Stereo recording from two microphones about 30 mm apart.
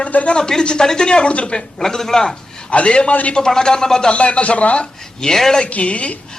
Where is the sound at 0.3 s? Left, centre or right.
Left.